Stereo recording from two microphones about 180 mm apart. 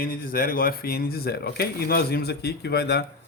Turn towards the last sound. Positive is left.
turn(degrees=65)  # may be behind; listen again after turning